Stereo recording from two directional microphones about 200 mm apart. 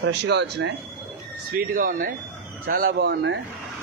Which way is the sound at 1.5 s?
45° right (ahead or behind).